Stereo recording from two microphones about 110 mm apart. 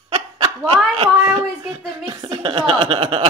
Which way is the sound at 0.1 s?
60° right (ahead or behind).